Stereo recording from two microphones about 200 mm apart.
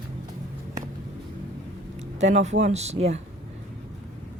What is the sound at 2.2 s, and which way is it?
Speech, 35° right (ahead or behind).